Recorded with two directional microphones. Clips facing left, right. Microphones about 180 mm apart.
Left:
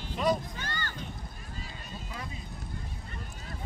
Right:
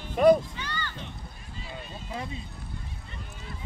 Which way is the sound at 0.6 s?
45° left (ahead or behind).